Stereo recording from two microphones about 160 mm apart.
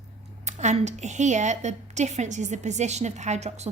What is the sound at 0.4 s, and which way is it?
A woman's voice, 45° right (ahead or behind).